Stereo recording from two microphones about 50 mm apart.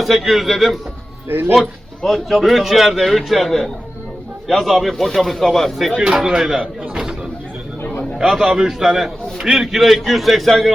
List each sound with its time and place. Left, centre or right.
0.0 s a man's voice: centre
1.3 s speech: right
2.0 s speech: centre
2.3 s a man's voice: centre
6.6 s a sound: centre
8.2 s a man's voice: centre